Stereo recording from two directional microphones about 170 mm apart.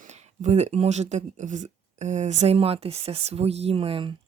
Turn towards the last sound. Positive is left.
turn(degrees=-35)  # may be behind; listen again after turning